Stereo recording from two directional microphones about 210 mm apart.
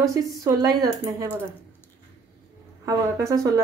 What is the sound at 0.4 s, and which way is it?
Speech, 15° right (ahead or behind).